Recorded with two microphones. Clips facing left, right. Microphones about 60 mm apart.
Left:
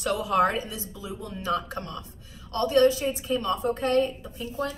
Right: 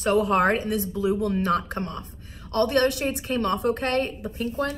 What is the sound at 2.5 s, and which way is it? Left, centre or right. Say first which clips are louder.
A woman's voice: left 1 dB; right.